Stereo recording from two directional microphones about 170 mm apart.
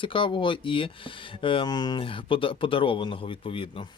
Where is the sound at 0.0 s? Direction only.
30° left (ahead or behind).